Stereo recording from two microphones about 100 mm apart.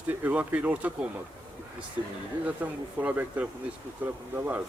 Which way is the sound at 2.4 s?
15° right (ahead or behind).